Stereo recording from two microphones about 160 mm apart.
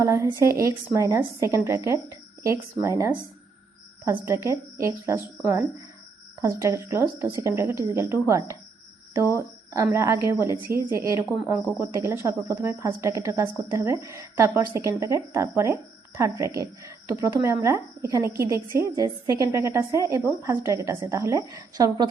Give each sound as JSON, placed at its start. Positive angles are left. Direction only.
{"t": 0.0, "sound": "a woman's voice", "side_deg": -15}